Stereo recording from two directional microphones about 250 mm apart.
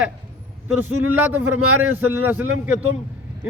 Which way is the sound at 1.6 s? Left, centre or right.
Right.